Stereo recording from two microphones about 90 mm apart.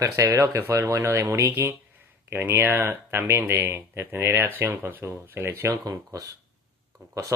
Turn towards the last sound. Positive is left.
turn(degrees=-40)  # may be behind; listen again after turning